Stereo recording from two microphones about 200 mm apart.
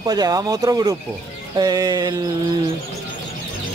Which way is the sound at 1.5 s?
20° right (ahead or behind).